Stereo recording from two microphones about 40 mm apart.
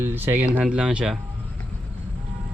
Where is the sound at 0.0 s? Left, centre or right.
Right.